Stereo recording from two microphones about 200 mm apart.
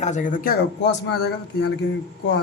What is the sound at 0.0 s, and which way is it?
Speech, 40° left (ahead or behind).